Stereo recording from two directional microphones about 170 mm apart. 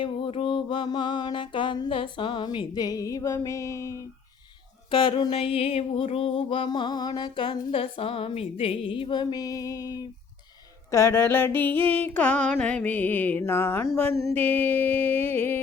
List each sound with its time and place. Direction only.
0.0 s music: 30° left (ahead or behind)
4.9 s a sound: 30° left (ahead or behind)
10.9 s music: 15° left (ahead or behind)